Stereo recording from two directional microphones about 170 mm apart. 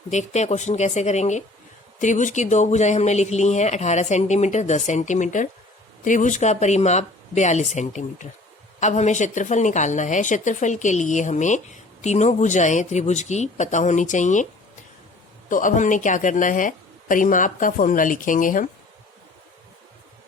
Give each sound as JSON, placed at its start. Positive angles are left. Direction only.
{"t": 0.1, "sound": "speech", "side_deg": 45}
{"t": 15.4, "sound": "speech", "side_deg": 50}